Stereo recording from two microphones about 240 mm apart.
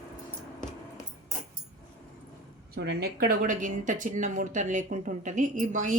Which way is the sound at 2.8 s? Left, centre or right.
Right.